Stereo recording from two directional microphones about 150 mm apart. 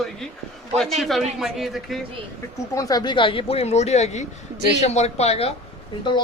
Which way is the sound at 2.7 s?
25° left (ahead or behind).